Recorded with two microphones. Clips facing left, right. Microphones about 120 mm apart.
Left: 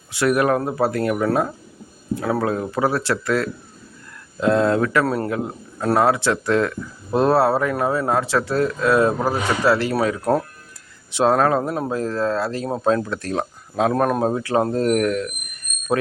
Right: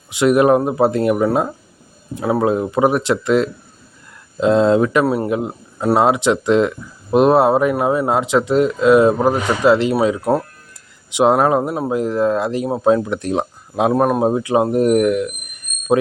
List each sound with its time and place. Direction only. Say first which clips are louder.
0.1 s speech: right 6 dB; 20° right (ahead or behind)